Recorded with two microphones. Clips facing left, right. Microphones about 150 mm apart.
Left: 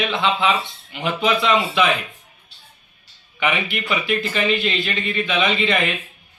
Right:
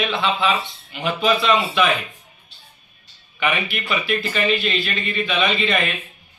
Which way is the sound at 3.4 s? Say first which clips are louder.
Left 1 dB; 20° left (ahead or behind).